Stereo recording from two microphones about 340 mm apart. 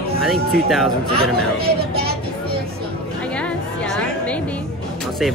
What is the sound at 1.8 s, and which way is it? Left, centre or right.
Child singing, right.